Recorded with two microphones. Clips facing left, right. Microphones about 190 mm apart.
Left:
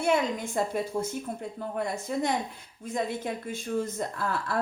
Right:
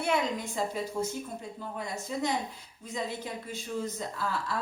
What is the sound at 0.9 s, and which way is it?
Speech, 50° left (ahead or behind).